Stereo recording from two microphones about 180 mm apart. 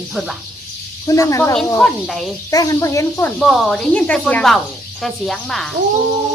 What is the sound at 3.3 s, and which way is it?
Speech, centre (ahead or behind).